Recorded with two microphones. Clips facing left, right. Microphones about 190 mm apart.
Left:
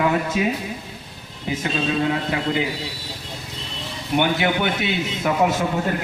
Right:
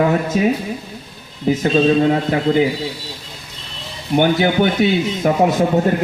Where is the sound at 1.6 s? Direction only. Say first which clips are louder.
Right 8 dB; 45° right (ahead or behind).